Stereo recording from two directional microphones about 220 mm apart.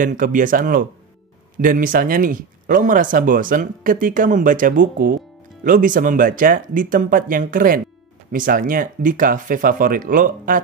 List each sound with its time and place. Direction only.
0.0 s speech: 35° right (ahead or behind)